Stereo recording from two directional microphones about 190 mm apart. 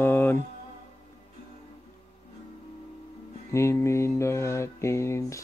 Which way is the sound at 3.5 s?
15° left (ahead or behind).